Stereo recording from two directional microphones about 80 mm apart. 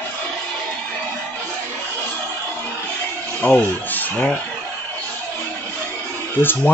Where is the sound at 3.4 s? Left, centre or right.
Centre.